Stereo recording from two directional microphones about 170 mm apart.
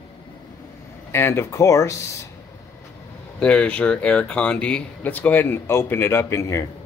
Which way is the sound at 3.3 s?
5° left (ahead or behind).